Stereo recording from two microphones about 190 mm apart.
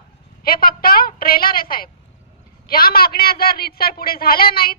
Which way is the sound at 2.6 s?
50° left (ahead or behind).